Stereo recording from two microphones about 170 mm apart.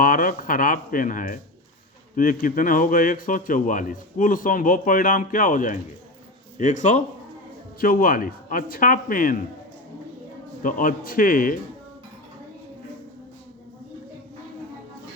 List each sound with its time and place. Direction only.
0.0 s speech: 55° left (ahead or behind)
7.8 s speech: 55° left (ahead or behind)
10.6 s speech: 55° left (ahead or behind)